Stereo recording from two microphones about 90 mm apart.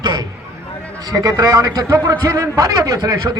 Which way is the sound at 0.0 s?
45° right (ahead or behind).